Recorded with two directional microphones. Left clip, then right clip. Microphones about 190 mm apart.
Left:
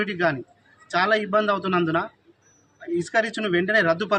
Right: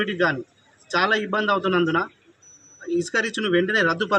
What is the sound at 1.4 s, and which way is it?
A man's voice, 30° left (ahead or behind).